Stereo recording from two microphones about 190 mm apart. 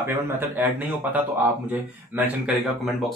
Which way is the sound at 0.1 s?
10° right (ahead or behind).